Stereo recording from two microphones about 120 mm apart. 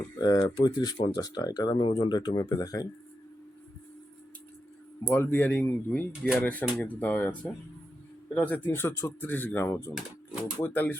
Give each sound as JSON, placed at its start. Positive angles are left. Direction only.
{"t": 0.2, "sound": "speech", "side_deg": 35}
{"t": 1.1, "sound": "speech", "side_deg": 30}
{"t": 5.0, "sound": "speech", "side_deg": 15}